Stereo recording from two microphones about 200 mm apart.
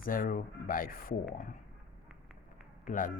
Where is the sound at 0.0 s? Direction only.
45° left (ahead or behind).